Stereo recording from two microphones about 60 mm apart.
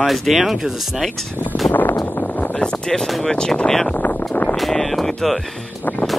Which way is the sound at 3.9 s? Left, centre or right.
Left.